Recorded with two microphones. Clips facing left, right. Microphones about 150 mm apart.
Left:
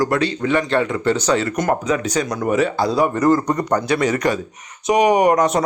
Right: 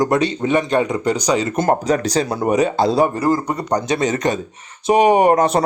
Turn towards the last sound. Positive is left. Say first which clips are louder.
# right 1 dB
turn(degrees=-30)  # may be behind; listen again after turning